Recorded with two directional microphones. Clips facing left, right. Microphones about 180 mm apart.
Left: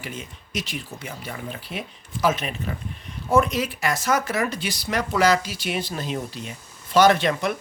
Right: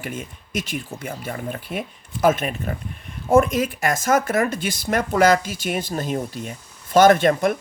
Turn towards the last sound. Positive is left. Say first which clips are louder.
# right 4 dB
turn(degrees=-50)  # may be behind; listen again after turning